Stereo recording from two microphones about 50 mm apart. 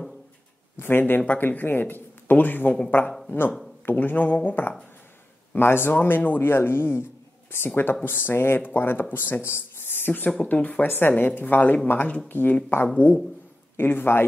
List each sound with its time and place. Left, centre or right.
0.7 s speech: left
1.2 s speech: left
5.6 s speech: left
5.9 s speech: left
10.5 s speech: left
10.9 s speech: left
12.9 s dog: left
13.7 s speech: left